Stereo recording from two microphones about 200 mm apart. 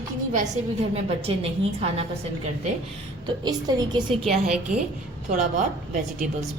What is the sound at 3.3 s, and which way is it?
Speech, 20° right (ahead or behind).